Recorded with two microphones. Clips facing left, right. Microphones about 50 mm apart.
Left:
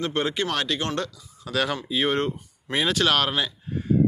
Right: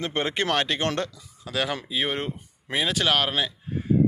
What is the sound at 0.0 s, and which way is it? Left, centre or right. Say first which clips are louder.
Speech: left 1 dB; right.